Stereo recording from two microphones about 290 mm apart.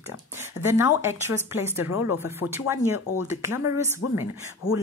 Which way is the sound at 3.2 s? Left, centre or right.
Centre.